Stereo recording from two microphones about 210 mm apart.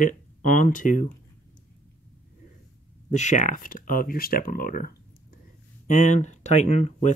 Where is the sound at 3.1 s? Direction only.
35° left (ahead or behind).